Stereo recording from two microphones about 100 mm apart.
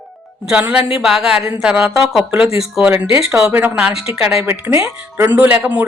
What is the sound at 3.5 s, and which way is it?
A woman's voice, 20° right (ahead or behind).